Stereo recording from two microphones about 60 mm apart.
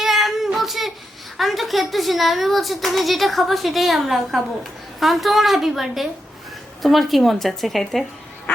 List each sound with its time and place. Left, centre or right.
0.0 s child singing: centre
1.4 s a woman's voice: centre
8.5 s duck: left